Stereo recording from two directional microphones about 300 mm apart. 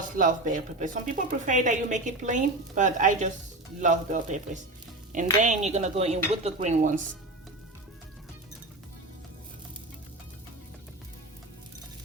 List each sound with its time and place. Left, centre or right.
0.2 s speech: right
5.4 s speech: right